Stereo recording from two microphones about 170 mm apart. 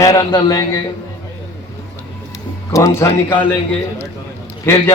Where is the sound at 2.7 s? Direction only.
15° left (ahead or behind).